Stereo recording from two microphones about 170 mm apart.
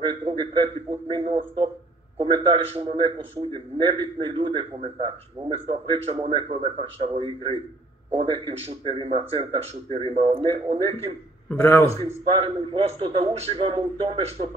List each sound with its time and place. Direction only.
0.0 s a man's voice: 35° right (ahead or behind)
11.4 s a man's voice: 10° left (ahead or behind)
12.1 s speech: 40° right (ahead or behind)